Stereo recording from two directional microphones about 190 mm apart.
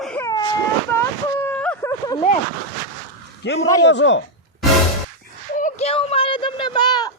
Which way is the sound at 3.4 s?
70° left (ahead or behind).